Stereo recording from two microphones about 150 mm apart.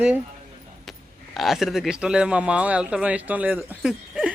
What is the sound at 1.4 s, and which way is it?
Speech, centre (ahead or behind).